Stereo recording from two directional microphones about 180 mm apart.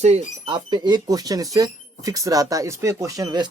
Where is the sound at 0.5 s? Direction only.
25° right (ahead or behind).